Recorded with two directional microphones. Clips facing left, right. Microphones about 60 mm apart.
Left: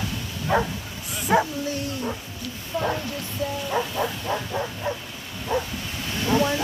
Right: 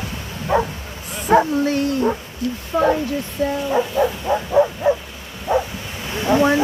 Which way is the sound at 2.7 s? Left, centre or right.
Right.